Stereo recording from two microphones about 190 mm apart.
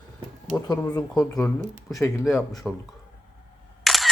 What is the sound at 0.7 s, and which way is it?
Speech, 20° left (ahead or behind).